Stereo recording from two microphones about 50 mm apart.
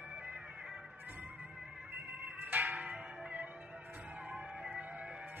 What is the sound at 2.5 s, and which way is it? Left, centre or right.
Music, right.